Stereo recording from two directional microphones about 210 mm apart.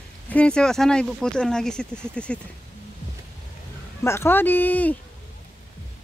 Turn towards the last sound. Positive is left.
turn(degrees=10)  # may be behind; listen again after turning